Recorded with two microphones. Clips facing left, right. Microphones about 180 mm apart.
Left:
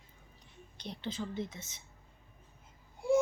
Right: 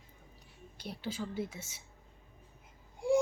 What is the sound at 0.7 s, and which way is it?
A child's voice, 5° right (ahead or behind).